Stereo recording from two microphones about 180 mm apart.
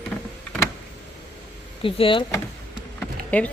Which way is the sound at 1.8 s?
30° left (ahead or behind).